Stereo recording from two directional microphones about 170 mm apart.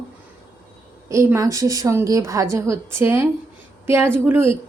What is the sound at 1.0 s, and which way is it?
Speech, 15° right (ahead or behind).